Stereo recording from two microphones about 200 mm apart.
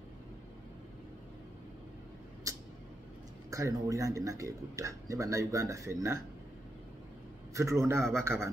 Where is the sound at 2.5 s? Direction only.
15° right (ahead or behind).